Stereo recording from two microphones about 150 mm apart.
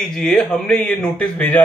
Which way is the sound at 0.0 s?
5° left (ahead or behind).